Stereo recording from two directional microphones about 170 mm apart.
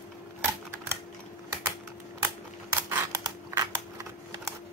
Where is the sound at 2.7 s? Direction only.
20° right (ahead or behind).